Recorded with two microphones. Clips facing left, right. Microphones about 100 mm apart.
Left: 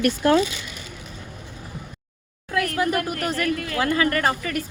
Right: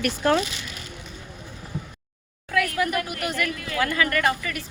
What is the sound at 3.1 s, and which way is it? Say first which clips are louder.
Speech: left 4 dB; 40° left (ahead or behind).